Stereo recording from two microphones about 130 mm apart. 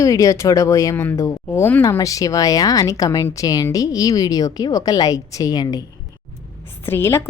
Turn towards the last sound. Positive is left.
turn(degrees=20)  # may be behind; listen again after turning